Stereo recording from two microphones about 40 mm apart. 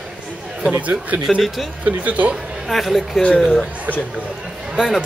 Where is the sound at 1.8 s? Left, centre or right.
Right.